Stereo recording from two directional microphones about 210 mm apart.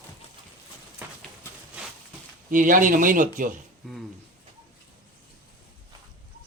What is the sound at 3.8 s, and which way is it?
Speech, 5° left (ahead or behind).